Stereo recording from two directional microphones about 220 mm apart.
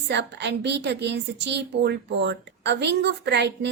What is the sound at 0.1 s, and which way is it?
A woman's voice, 50° right (ahead or behind).